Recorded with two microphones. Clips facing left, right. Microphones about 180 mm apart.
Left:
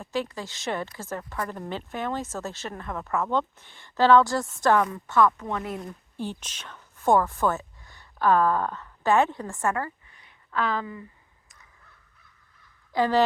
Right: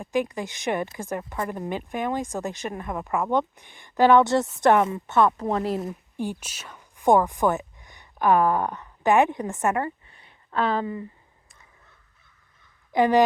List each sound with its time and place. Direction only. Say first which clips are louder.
0.0 s speech: right 4 dB; 15° right (ahead or behind); by 5.8 s 35° right (ahead or behind)
5.9 s a woman's voice: right 3 dB; 10° right (ahead or behind); by 11.0 s 30° right (ahead or behind)
12.9 s a woman's voice: right 3 dB; 20° right (ahead or behind)